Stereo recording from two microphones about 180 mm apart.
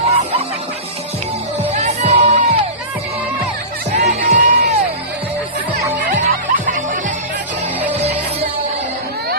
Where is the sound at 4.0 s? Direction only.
40° right (ahead or behind).